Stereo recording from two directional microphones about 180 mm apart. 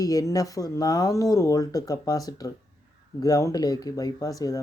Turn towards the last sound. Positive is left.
turn(degrees=20)  # may be behind; listen again after turning